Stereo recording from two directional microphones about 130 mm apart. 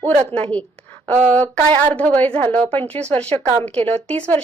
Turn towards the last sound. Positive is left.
turn(degrees=10)  # may be behind; listen again after turning